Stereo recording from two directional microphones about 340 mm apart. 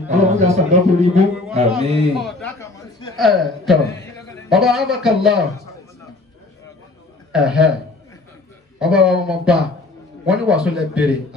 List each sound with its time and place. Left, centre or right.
0.1 s a man's voice: centre
2.1 s a sound: centre
4.5 s a man's voice: centre
7.3 s a man's voice: centre
8.7 s a man's voice: centre